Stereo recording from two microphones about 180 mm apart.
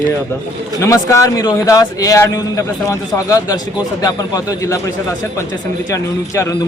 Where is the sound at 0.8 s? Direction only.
15° left (ahead or behind).